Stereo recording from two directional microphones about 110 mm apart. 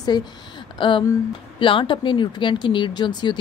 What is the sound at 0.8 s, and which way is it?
Speech, 50° left (ahead or behind).